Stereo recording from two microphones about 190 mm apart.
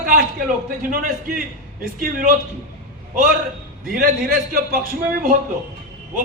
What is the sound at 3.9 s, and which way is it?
A man's voice, 50° right (ahead or behind).